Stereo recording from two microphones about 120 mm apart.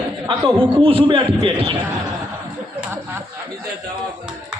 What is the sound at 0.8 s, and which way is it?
Speech, 45° right (ahead or behind).